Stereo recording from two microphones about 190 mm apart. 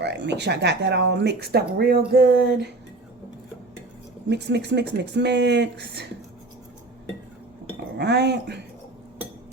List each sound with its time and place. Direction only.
0.0 s speech: 65° right (ahead or behind)
4.3 s speech: 65° right (ahead or behind)
7.9 s speech: 60° right (ahead or behind)